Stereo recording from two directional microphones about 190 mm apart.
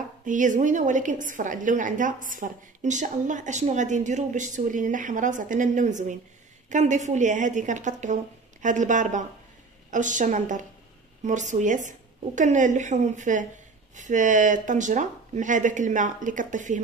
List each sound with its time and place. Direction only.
0.2 s a woman's voice: 40° right (ahead or behind)